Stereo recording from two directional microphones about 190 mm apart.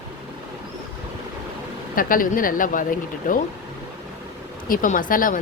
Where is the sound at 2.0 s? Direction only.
45° left (ahead or behind).